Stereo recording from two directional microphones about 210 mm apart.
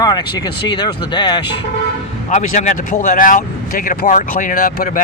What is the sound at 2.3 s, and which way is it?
Speech, 35° left (ahead or behind).